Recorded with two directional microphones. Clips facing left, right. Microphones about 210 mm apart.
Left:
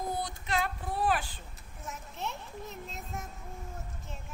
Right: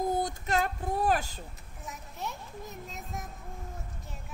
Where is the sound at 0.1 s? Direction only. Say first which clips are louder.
Right 4 dB; 45° right (ahead or behind).